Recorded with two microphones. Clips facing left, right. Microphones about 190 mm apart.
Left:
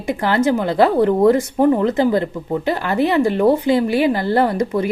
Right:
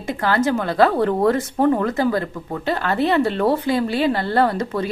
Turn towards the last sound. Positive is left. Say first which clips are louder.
# left 2 dB
turn(degrees=20)  # may be behind; listen again after turning